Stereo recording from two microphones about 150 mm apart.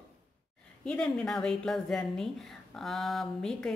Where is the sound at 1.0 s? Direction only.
5° left (ahead or behind).